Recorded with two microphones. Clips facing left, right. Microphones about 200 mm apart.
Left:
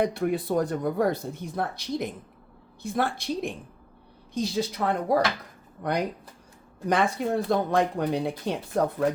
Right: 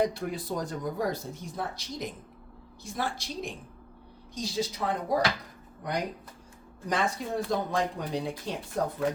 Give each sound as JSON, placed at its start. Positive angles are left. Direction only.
{"t": 0.0, "sound": "speech", "side_deg": 60}